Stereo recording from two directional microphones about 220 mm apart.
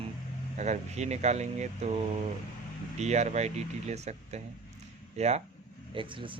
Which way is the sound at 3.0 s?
30° right (ahead or behind).